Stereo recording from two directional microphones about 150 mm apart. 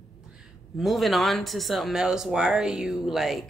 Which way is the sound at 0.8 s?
Centre (ahead or behind).